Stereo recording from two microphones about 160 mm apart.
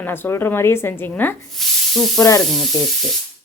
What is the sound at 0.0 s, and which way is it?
Speech, 15° left (ahead or behind).